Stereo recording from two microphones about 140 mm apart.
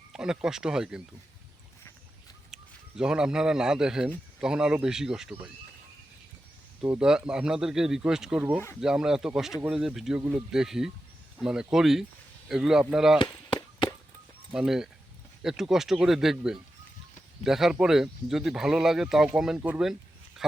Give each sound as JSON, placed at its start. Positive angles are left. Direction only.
{"t": 0.1, "sound": "speech", "side_deg": -5}
{"t": 2.5, "sound": "a man's voice", "side_deg": -5}
{"t": 6.8, "sound": "speech", "side_deg": -10}
{"t": 13.1, "sound": "chop", "side_deg": 30}
{"t": 14.5, "sound": "speech", "side_deg": -5}